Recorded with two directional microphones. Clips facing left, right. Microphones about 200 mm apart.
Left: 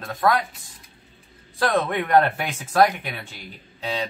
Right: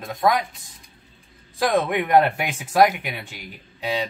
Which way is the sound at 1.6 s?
15° right (ahead or behind).